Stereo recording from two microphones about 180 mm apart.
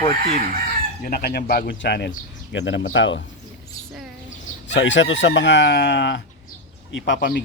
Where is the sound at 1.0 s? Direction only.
60° left (ahead or behind).